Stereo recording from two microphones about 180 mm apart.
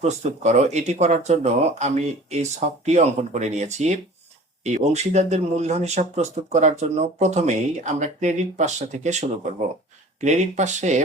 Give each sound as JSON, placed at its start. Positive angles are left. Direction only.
{"t": 0.0, "sound": "speech", "side_deg": -40}